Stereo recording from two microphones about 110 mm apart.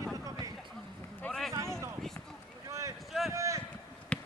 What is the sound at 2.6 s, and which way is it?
Boat, 30° right (ahead or behind).